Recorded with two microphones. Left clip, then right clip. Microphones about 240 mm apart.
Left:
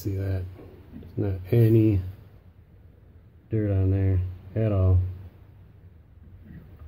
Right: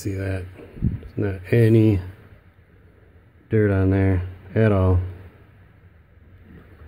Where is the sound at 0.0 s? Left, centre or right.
Right.